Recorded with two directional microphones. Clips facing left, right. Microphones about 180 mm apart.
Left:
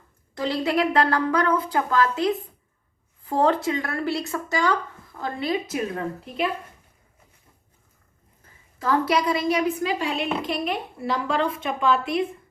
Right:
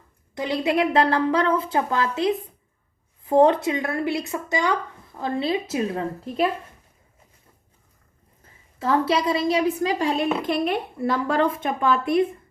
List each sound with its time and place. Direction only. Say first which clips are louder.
0.3 s a woman's voice: right 1 dB; 20° right (ahead or behind)
8.8 s a woman's voice: right 1 dB; 30° right (ahead or behind); by 12.2 s 50° right (ahead or behind)